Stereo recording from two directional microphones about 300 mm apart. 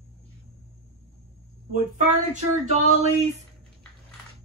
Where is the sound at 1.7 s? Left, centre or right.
Right.